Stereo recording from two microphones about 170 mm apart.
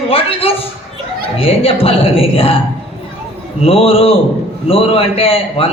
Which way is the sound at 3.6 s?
35° left (ahead or behind).